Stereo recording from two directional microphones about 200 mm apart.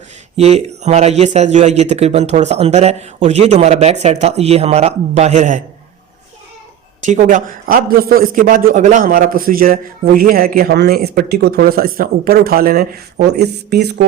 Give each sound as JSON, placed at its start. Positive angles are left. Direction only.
{"t": 0.3, "sound": "speech", "side_deg": -35}
{"t": 7.0, "sound": "a man's voice", "side_deg": -40}